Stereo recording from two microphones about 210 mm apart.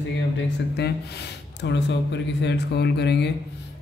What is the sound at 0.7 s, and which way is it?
Speech, 50° left (ahead or behind).